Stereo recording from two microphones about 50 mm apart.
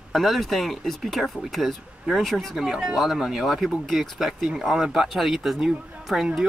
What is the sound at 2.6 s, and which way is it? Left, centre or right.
Speech, centre.